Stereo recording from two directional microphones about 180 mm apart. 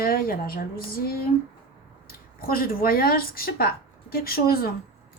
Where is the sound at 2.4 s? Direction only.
55° left (ahead or behind).